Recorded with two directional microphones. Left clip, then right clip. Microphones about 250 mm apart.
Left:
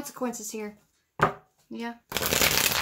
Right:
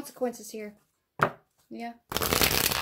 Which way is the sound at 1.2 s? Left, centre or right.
Right.